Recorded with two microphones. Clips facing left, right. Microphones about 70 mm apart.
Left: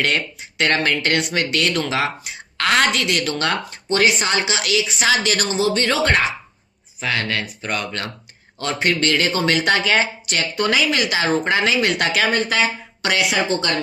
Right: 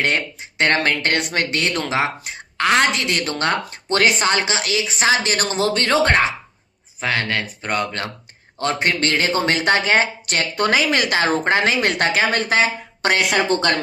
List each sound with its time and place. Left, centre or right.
0.6 s speech: right
2.6 s a woman's voice: centre
2.9 s speech: right
10.3 s a woman's voice: right